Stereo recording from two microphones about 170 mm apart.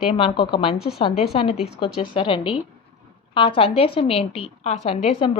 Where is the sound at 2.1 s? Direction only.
30° left (ahead or behind).